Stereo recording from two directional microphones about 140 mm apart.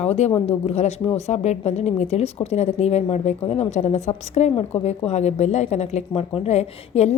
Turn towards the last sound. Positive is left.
turn(degrees=50)  # may be behind; listen again after turning